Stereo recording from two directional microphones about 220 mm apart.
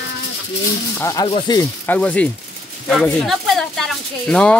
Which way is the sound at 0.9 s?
15° left (ahead or behind).